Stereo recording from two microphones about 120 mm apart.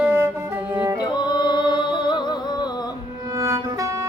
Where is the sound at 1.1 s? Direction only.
40° left (ahead or behind).